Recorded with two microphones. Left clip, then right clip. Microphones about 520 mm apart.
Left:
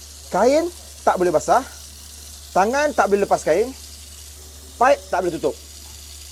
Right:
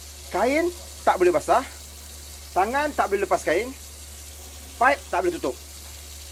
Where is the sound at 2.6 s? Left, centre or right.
Left.